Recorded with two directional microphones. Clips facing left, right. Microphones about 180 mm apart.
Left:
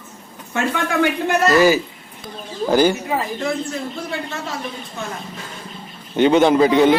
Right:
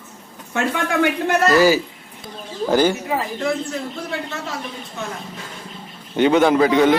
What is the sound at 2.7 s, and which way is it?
Child singing, 10° left (ahead or behind).